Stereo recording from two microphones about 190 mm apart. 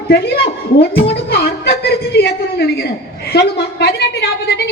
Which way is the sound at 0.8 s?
55° left (ahead or behind).